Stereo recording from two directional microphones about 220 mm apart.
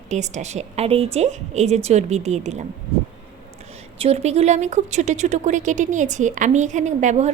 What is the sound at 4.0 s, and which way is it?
Speech, 30° right (ahead or behind).